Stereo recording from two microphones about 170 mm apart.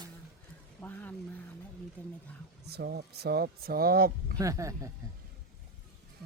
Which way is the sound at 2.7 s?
75° right (ahead or behind).